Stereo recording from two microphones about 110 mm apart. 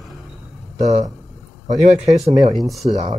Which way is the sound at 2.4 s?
45° right (ahead or behind).